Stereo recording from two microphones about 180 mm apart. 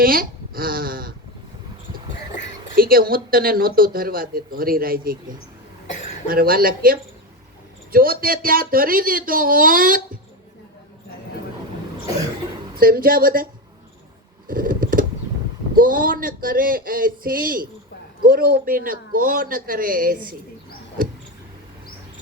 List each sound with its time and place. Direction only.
0.0 s speech: 55° right (ahead or behind)
2.7 s speech: 55° right (ahead or behind)
6.2 s speech: 55° right (ahead or behind)
12.8 s speech: 55° right (ahead or behind)
14.4 s a sound: 50° right (ahead or behind)
15.7 s speech: 50° right (ahead or behind)